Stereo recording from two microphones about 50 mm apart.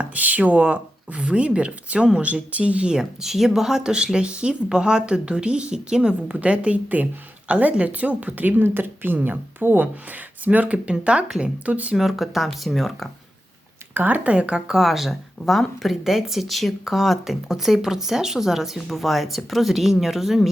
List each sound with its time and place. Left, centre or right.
0.0 s speech: right
2.9 s speech: centre
6.2 s a woman's voice: right
11.9 s speech: centre
13.9 s speech: right
14.3 s speech: right
14.7 s speech: centre